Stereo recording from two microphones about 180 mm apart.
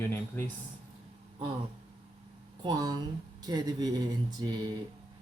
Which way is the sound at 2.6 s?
25° right (ahead or behind).